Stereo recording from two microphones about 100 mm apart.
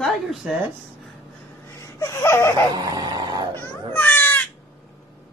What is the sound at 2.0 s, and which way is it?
Laughter, 25° left (ahead or behind).